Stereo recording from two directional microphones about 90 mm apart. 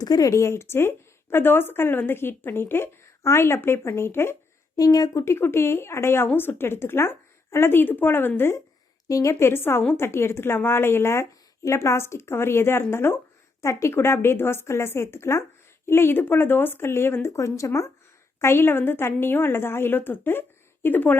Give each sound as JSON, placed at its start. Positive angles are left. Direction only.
{"t": 0.0, "sound": "speech", "side_deg": 45}
{"t": 4.8, "sound": "speech", "side_deg": 45}
{"t": 5.2, "sound": "speech", "side_deg": 25}
{"t": 9.0, "sound": "a woman's voice", "side_deg": 40}
{"t": 9.3, "sound": "speech", "side_deg": 25}